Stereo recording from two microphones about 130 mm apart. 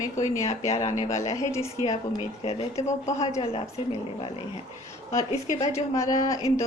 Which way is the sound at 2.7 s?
60° left (ahead or behind).